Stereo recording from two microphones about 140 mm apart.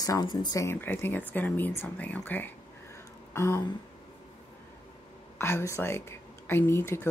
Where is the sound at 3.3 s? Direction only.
20° left (ahead or behind).